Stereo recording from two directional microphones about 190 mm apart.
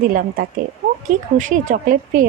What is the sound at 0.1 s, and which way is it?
Speech, 45° right (ahead or behind).